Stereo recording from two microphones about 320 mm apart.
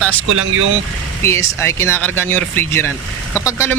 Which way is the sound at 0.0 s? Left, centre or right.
Centre.